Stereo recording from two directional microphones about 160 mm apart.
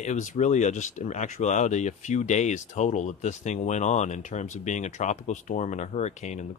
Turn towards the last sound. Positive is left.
turn(degrees=45)  # may be behind; listen again after turning